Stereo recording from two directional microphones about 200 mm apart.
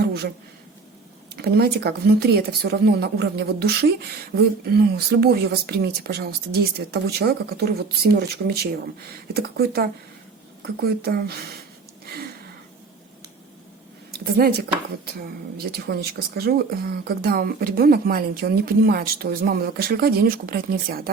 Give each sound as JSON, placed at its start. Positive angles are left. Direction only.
{"t": 0.0, "sound": "a sound", "side_deg": -55}
{"t": 1.4, "sound": "speech", "side_deg": -50}
{"t": 15.7, "sound": "speech", "side_deg": -55}